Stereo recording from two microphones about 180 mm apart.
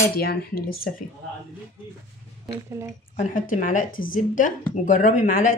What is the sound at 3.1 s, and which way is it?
Speech, 45° left (ahead or behind).